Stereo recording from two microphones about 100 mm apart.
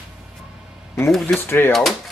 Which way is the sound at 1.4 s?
25° left (ahead or behind).